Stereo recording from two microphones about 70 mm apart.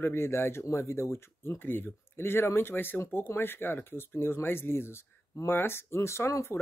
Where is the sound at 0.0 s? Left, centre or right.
Left.